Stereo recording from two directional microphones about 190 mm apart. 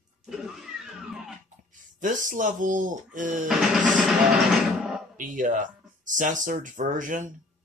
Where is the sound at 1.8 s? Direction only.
45° right (ahead or behind).